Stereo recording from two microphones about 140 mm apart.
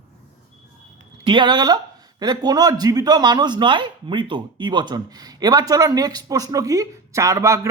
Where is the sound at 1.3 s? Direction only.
35° right (ahead or behind).